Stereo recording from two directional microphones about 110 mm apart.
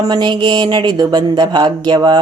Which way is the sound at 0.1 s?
45° right (ahead or behind).